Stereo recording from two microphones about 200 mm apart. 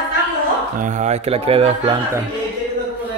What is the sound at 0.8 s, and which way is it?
Speech, 35° right (ahead or behind).